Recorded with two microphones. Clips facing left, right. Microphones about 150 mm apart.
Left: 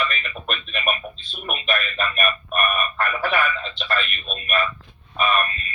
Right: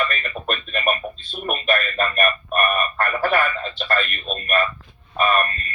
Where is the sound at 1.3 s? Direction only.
45° right (ahead or behind).